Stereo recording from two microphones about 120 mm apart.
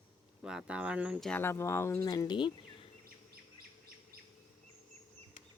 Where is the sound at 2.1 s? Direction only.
35° left (ahead or behind).